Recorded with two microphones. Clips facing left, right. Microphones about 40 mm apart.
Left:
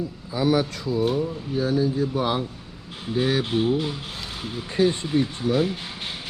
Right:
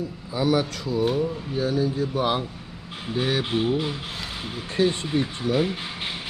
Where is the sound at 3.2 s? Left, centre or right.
Centre.